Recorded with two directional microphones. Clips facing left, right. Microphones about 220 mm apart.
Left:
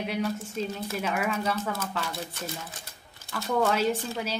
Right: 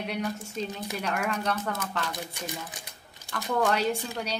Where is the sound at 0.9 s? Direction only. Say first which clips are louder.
Left 1 dB; centre (ahead or behind).